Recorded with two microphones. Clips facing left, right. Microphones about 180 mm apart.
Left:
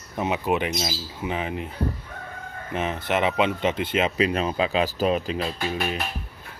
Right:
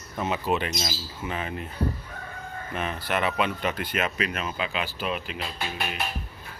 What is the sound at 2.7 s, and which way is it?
Speech, 20° left (ahead or behind).